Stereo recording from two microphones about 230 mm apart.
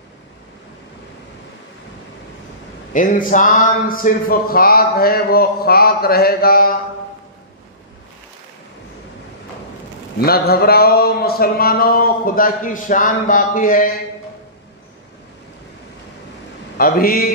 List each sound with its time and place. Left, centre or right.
2.9 s speech: left
10.2 s speech: left
16.7 s speech: left